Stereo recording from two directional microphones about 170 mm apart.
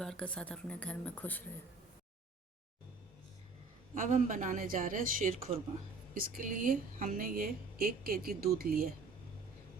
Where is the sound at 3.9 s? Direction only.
50° right (ahead or behind).